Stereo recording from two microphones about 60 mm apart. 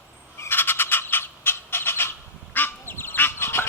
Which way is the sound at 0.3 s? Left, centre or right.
Left.